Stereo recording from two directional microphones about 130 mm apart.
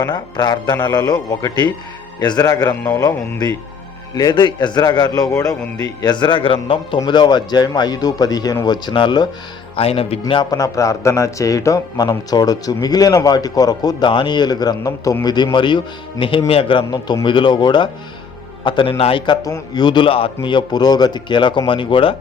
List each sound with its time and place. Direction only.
0.1 s a man's voice: 35° left (ahead or behind)
9.7 s speech: 45° left (ahead or behind)
10.5 s a man's voice: 25° left (ahead or behind)